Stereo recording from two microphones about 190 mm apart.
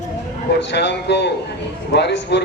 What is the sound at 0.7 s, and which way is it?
A man's voice, 65° left (ahead or behind).